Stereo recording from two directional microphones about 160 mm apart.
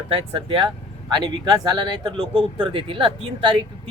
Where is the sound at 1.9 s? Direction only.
30° right (ahead or behind).